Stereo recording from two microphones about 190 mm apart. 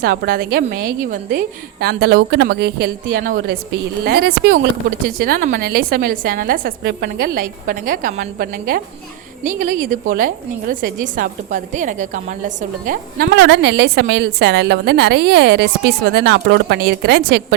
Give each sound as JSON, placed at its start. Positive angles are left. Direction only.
{"t": 0.0, "sound": "a woman's voice", "side_deg": -50}
{"t": 13.3, "sound": "a woman's voice", "side_deg": -70}